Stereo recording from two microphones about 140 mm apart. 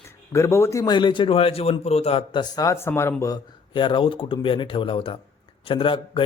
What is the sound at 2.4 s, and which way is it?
Speech, 25° left (ahead or behind).